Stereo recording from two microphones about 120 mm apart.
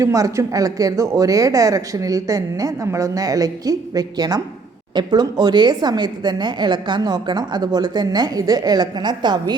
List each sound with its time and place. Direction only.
0.0 s a woman's voice: 25° right (ahead or behind)